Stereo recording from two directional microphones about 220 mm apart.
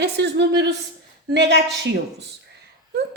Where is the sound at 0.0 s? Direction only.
50° right (ahead or behind).